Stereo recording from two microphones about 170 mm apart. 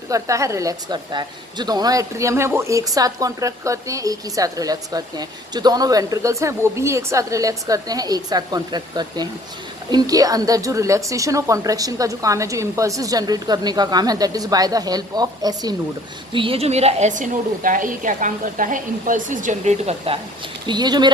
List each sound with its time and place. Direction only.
0.1 s a woman's voice: 20° right (ahead or behind); by 20.1 s 40° right (ahead or behind)
20.7 s a woman's voice: 25° right (ahead or behind)